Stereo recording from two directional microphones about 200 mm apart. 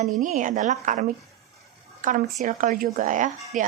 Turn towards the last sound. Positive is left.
turn(degrees=-40)  # may be behind; listen again after turning